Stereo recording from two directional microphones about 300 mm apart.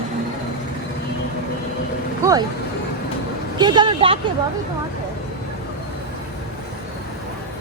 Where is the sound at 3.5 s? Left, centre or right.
Centre.